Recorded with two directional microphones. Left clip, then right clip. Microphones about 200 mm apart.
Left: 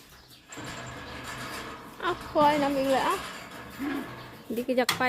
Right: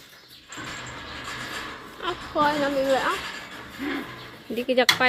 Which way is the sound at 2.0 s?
25° left (ahead or behind).